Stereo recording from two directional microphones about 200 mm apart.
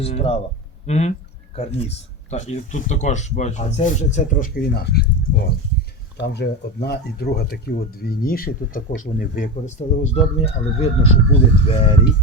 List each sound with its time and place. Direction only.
0.0 s speech: 30° left (ahead or behind)